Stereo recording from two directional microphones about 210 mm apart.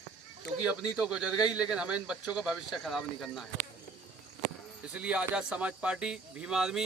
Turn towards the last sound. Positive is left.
turn(degrees=0)  # may be behind; listen again after turning